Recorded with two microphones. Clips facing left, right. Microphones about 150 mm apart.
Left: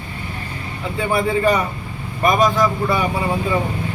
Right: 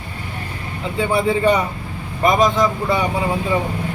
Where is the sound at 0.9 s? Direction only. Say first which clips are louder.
Right 1 dB; 25° right (ahead or behind).